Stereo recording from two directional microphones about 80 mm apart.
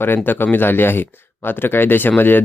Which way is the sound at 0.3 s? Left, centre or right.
Left.